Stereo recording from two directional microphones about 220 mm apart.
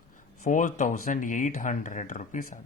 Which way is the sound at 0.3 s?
35° left (ahead or behind).